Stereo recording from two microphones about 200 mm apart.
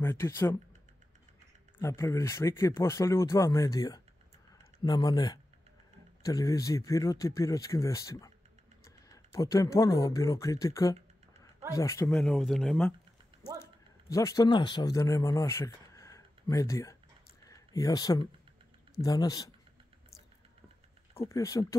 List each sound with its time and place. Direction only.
0.0 s speech: 10° left (ahead or behind)
1.8 s speech: 15° left (ahead or behind)
14.1 s speech: 15° left (ahead or behind)
21.3 s speech: 15° left (ahead or behind)